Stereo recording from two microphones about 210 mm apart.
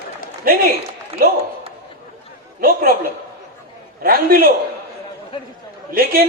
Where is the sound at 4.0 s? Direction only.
45° right (ahead or behind).